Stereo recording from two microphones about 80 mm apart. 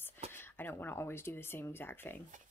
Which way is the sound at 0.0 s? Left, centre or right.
Left.